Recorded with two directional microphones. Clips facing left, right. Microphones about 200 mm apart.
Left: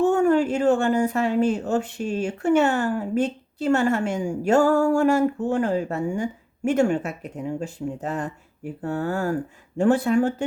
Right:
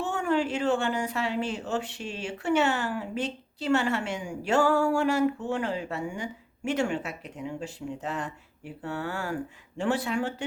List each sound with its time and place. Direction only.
0.0 s speech: 45° left (ahead or behind)